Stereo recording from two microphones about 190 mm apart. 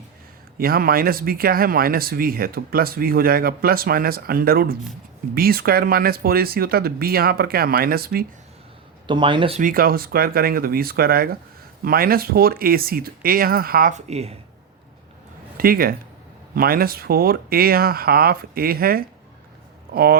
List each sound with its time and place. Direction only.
0.6 s speech: 50° right (ahead or behind)
9.0 s speech: 25° right (ahead or behind)
9.6 s speech: 50° right (ahead or behind)
14.1 s speech: 35° right (ahead or behind)
15.5 s speech: 50° right (ahead or behind)